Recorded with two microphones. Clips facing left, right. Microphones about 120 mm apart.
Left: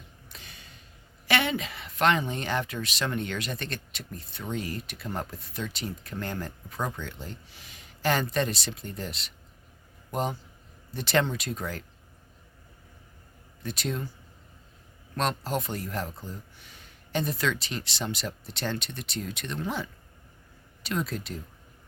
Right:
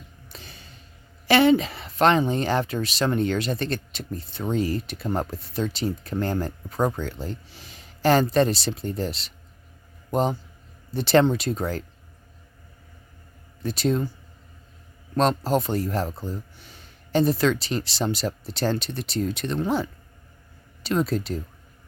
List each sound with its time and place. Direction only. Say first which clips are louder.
0.3 s a sound: right 5 dB; 30° right (ahead or behind)
1.3 s a man's voice: right 10 dB; 35° right (ahead or behind)
13.6 s speech: right 9 dB; 35° right (ahead or behind)
15.1 s speech: right 8 dB; 35° right (ahead or behind)